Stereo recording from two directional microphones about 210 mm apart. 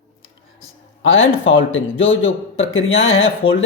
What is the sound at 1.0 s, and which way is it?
A man's voice, 65° left (ahead or behind).